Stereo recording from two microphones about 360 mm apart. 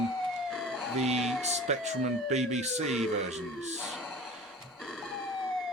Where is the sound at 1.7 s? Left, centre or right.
Centre.